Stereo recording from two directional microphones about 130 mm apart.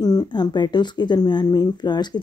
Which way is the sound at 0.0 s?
30° left (ahead or behind).